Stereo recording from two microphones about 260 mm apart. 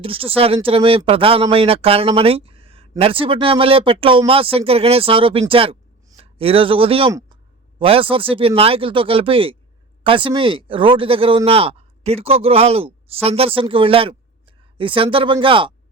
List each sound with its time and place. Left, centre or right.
0.0 s speech: right